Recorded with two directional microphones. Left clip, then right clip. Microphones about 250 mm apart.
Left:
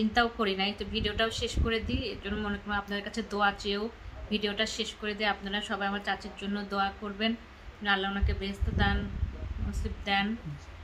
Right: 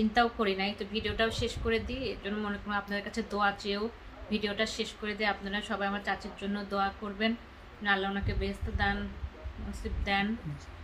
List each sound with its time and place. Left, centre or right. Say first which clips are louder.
0.0 s a woman's voice: even; centre